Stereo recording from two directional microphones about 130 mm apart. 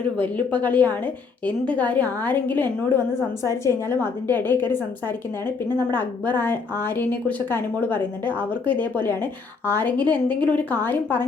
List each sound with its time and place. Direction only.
0.2 s a woman's voice: 10° left (ahead or behind)
9.6 s a woman's voice: 15° left (ahead or behind)